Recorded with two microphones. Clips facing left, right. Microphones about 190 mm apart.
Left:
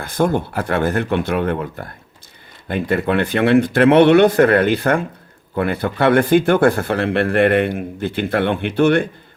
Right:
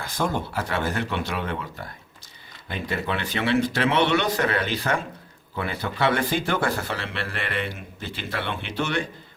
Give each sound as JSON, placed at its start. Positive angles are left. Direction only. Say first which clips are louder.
{"t": 0.0, "sound": "speech", "louder": "left 8 dB", "side_deg": 55}